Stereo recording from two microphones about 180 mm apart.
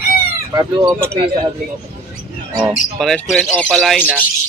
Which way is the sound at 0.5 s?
20° right (ahead or behind).